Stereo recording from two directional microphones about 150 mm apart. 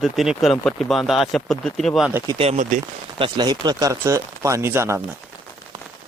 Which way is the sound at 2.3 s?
40° right (ahead or behind).